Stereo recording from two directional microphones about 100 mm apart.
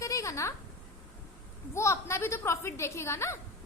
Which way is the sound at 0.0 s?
35° left (ahead or behind).